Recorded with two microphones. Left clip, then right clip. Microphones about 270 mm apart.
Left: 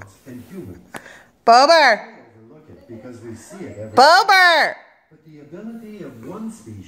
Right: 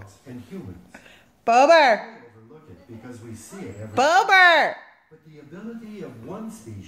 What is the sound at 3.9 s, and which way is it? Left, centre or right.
Speech, centre.